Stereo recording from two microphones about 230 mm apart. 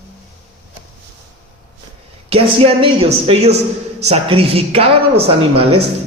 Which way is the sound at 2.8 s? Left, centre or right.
Right.